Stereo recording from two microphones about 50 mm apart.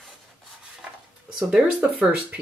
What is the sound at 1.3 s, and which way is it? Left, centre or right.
Speech, centre.